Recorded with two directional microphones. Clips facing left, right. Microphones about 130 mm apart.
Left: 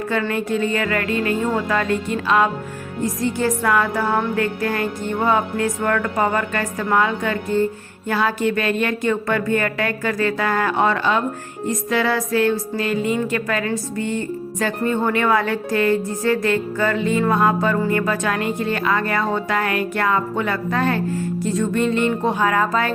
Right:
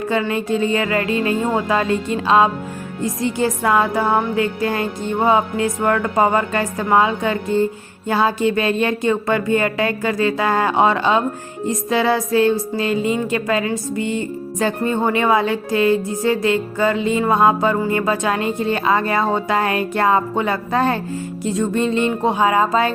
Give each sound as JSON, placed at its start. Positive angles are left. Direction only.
{"t": 0.1, "sound": "a woman's voice", "side_deg": -20}